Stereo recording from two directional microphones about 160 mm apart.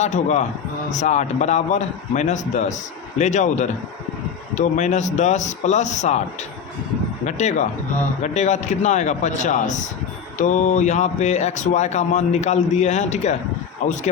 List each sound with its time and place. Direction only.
0.0 s speech: 45° left (ahead or behind)
7.3 s speech: 45° left (ahead or behind)